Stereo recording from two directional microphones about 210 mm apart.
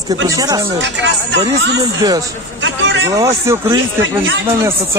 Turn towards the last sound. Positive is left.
turn(degrees=-15)  # may be behind; listen again after turning